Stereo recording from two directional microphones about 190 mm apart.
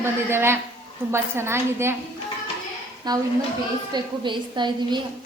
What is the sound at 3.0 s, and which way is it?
A woman's voice, 20° right (ahead or behind).